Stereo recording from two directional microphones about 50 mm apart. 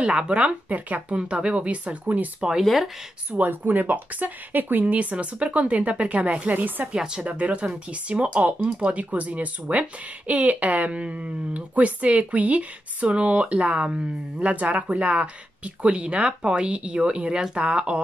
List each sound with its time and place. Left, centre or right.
0.0 s speech: right
3.3 s speech: right
6.9 s speech: centre
7.2 s speech: right